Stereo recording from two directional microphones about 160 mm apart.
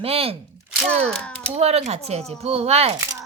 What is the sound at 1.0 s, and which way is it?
Speech, 5° left (ahead or behind).